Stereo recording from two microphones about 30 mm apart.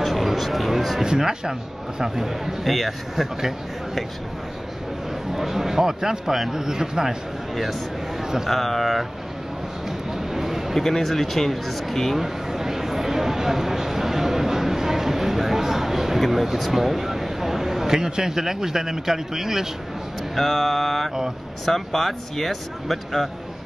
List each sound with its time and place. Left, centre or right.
0.0 s speech: centre
1.0 s a man's voice: right
2.0 s a man's voice: centre
3.3 s a man's voice: centre
5.3 s a man's voice: centre
8.5 s speech: centre
10.1 s a sound: centre
10.7 s speech: centre
12.2 s a sound: centre
16.2 s speech: centre
20.3 s speech: centre